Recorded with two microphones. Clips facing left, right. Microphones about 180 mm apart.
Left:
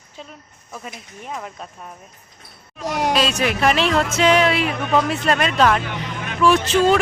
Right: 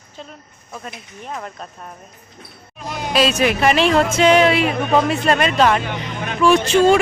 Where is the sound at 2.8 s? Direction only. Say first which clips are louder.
Left 5 dB; 75° left (ahead or behind).